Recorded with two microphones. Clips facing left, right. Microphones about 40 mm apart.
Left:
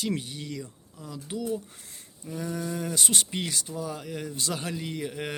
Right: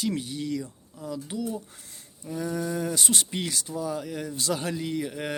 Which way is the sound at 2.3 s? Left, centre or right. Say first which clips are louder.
Right 3 dB; centre.